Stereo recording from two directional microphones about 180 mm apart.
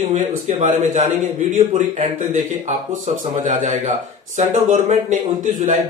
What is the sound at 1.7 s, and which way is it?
A man's voice, 35° right (ahead or behind).